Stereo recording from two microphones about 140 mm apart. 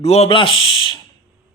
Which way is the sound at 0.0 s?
45° left (ahead or behind).